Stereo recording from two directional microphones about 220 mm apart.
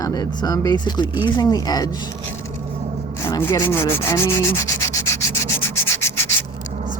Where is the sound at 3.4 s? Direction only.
10° left (ahead or behind).